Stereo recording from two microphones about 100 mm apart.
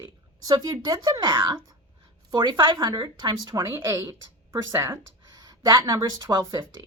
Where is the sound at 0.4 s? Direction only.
40° right (ahead or behind).